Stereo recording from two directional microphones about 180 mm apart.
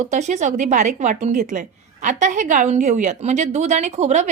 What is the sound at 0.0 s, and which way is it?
A woman's voice, 40° right (ahead or behind).